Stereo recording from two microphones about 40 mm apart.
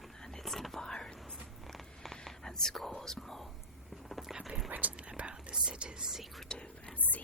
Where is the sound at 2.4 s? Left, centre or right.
Centre.